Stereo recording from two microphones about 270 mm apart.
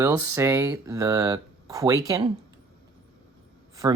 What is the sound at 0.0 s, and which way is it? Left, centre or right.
Speech, centre.